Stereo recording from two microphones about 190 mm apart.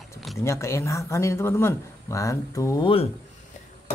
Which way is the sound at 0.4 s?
15° left (ahead or behind).